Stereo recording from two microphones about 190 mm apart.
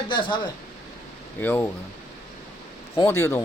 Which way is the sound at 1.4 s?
10° left (ahead or behind).